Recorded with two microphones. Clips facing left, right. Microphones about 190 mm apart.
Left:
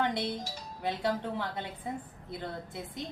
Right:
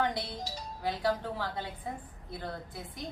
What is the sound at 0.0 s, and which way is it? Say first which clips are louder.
Music: left 1 dB; 20° left (ahead or behind).